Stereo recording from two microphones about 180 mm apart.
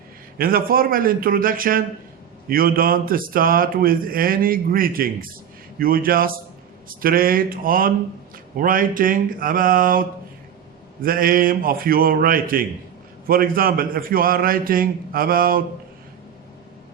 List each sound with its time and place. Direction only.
0.3 s speech: 55° right (ahead or behind)